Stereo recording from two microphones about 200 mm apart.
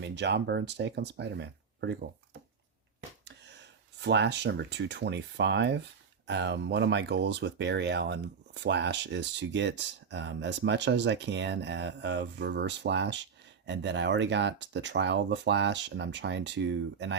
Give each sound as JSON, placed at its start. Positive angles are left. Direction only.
{"t": 0.0, "sound": "speech", "side_deg": -60}
{"t": 3.2, "sound": "speech", "side_deg": -60}